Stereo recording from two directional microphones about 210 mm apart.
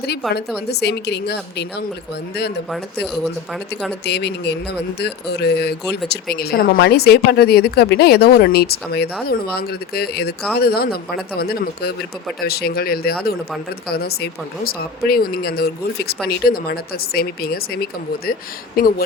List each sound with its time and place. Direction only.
0.7 s speech: 50° left (ahead or behind)
4.0 s speech: 50° left (ahead or behind)